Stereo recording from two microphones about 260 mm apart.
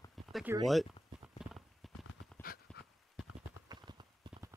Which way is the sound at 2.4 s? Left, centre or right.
Left.